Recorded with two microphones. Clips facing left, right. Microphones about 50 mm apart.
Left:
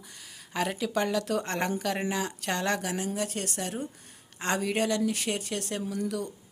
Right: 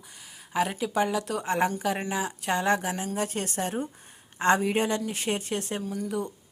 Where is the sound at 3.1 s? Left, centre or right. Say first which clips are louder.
Right 3 dB; right.